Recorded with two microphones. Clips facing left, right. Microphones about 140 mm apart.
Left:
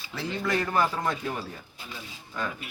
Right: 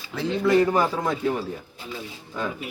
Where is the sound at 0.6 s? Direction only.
15° right (ahead or behind).